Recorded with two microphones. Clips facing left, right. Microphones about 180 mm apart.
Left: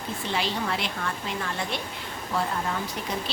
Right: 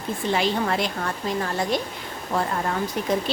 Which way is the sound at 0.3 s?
45° right (ahead or behind).